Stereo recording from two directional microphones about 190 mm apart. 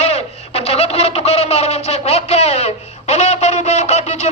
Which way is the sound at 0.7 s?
35° left (ahead or behind).